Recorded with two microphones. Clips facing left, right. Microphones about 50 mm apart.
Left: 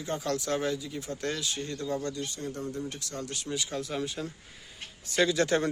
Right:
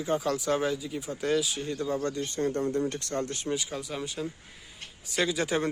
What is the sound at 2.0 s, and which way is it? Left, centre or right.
Speech, right.